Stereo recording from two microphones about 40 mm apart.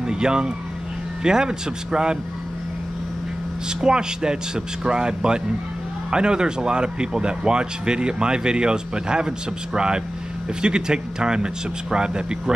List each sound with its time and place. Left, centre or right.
0.0 s vehicle: centre
1.2 s speech: centre
3.8 s speech: centre